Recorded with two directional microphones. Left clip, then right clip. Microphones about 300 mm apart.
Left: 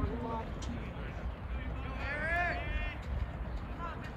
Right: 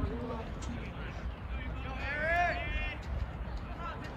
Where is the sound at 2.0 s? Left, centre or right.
Centre.